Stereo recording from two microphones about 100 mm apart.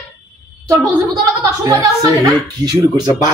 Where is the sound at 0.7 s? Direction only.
35° right (ahead or behind).